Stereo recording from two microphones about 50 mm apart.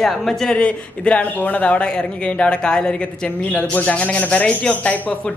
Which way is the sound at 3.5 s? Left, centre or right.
Left.